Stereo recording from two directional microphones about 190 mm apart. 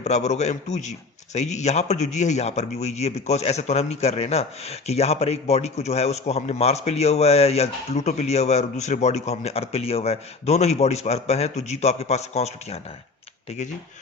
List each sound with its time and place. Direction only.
0.0 s a man's voice: 35° left (ahead or behind)